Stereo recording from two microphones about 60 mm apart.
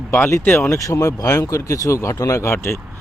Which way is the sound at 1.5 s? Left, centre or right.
Left.